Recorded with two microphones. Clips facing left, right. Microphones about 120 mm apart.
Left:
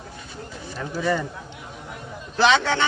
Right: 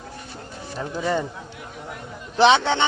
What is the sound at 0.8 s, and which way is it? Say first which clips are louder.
Speech: even; 20° right (ahead or behind).